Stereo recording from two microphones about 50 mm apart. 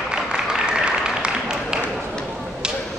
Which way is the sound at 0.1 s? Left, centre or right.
Centre.